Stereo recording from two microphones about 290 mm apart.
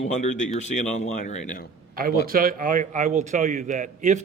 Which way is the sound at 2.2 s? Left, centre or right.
Right.